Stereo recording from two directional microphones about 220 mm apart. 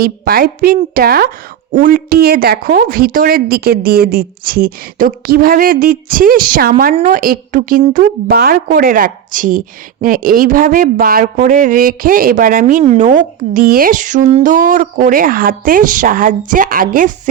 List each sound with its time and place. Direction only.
0.0 s a woman's voice: 45° right (ahead or behind)